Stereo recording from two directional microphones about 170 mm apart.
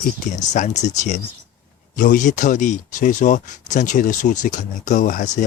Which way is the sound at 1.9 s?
50° left (ahead or behind).